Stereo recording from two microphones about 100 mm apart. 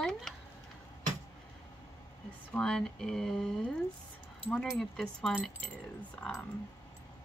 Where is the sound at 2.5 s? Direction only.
10° left (ahead or behind).